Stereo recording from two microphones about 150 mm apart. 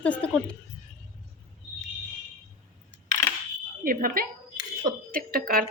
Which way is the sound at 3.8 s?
75° right (ahead or behind).